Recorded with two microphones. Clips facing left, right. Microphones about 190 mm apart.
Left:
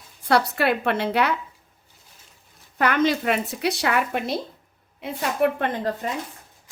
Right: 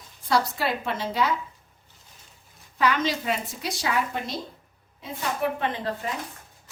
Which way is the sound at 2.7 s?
55° left (ahead or behind).